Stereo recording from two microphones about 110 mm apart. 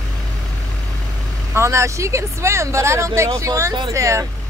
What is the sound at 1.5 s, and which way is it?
Speech, 25° right (ahead or behind).